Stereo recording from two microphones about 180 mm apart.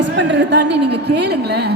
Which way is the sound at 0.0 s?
80° right.